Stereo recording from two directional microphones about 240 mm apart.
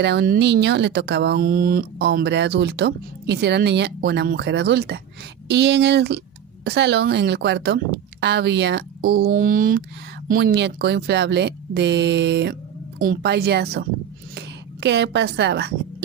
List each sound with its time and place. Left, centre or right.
0.0 s speech: right